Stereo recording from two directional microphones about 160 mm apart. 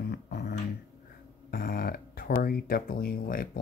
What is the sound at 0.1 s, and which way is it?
Beatboxing, 90° left.